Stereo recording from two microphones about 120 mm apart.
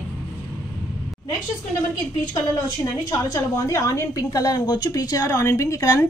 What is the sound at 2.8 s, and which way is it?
A woman's voice, 30° left (ahead or behind).